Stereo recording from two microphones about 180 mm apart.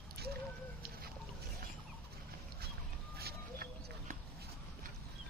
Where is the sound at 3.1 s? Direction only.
60° right (ahead or behind).